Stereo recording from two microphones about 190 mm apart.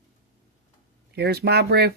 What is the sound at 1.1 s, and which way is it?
Speech, 60° right (ahead or behind).